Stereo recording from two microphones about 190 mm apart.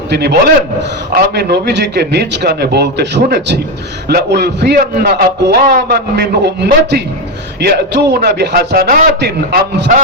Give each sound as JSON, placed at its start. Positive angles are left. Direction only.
{"t": 0.1, "sound": "a man's voice", "side_deg": -60}